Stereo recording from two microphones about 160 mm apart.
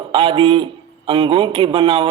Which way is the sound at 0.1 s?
35° right (ahead or behind).